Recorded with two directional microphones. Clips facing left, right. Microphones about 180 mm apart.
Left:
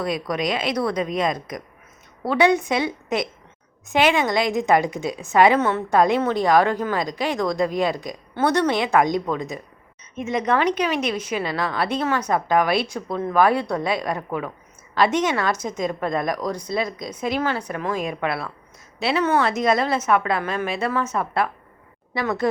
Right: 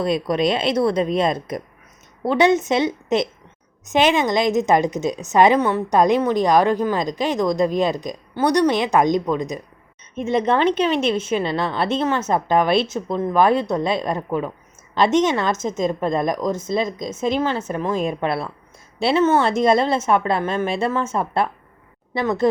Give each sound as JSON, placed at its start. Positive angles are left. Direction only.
{"t": 0.0, "sound": "a woman's voice", "side_deg": -25}
{"t": 10.2, "sound": "a woman's voice", "side_deg": -30}